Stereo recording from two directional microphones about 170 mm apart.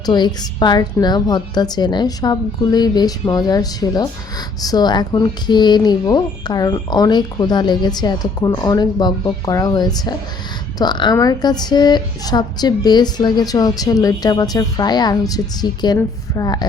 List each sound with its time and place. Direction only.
0.0 s a woman's voice: 25° left (ahead or behind)